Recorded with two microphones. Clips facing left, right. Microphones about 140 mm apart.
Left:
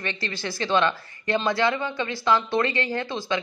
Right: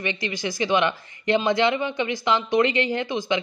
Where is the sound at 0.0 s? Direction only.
15° right (ahead or behind).